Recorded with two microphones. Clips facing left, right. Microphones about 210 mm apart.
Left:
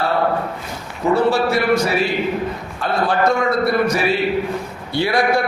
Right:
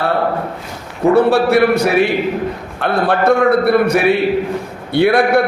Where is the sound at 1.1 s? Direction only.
60° right (ahead or behind).